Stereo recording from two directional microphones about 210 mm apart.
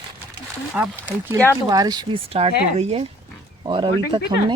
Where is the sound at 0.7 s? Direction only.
10° right (ahead or behind).